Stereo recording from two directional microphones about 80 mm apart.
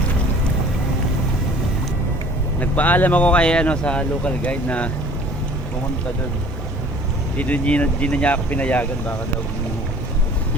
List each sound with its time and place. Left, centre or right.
2.6 s speech: left
7.3 s speech: centre